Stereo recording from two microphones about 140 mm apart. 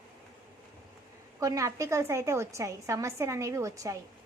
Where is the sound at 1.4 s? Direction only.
25° right (ahead or behind).